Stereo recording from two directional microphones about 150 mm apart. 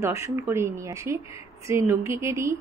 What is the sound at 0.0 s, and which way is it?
Speech, 20° right (ahead or behind).